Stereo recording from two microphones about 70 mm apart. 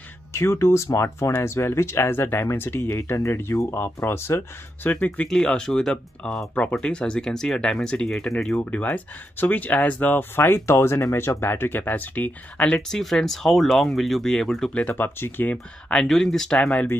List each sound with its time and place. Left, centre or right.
0.3 s speech: left
4.8 s speech: left
5.3 s speech: centre
8.6 s speech: left; by 14.7 s centre
14.7 s speech: centre
15.0 s speech: left
15.9 s speech: centre